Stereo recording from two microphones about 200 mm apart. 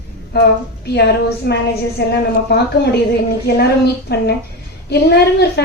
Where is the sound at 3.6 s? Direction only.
55° left (ahead or behind).